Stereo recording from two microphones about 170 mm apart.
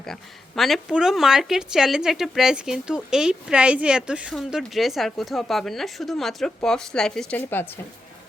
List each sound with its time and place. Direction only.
0.0 s speech: centre (ahead or behind)